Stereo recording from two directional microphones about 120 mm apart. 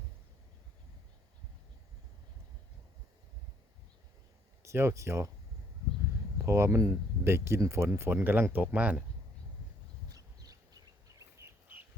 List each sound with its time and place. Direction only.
4.6 s speech: 20° right (ahead or behind)
6.4 s speech: 25° right (ahead or behind)
10.1 s a sound: 30° right (ahead or behind)